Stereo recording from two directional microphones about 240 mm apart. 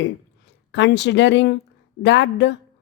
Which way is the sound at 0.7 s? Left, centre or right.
Left.